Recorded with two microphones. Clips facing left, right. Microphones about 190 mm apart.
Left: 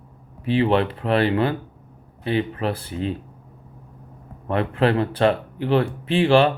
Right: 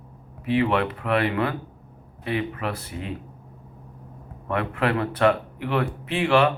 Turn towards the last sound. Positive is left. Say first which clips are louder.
# left 4 dB
turn(degrees=30)  # may be behind; listen again after turning